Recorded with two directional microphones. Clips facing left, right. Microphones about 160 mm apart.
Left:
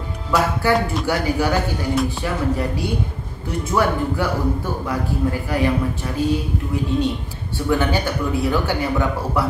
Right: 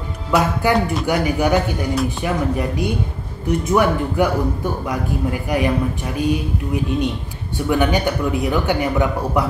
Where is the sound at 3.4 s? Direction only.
20° right (ahead or behind).